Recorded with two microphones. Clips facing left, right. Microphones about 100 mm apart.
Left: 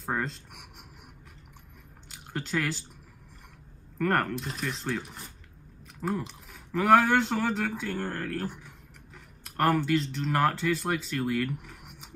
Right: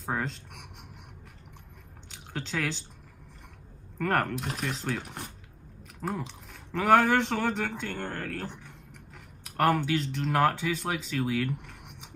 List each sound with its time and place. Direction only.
0.0 s speech: centre (ahead or behind)
2.0 s squish: 5° left (ahead or behind)
4.0 s speech: centre (ahead or behind)
5.0 s speech: 65° right (ahead or behind)
5.9 s speech: centre (ahead or behind)